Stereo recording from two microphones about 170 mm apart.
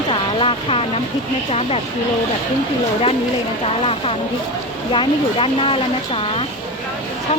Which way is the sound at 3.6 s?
35° left (ahead or behind).